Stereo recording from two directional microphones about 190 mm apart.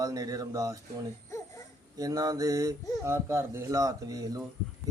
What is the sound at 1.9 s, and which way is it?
Speech, 20° right (ahead or behind).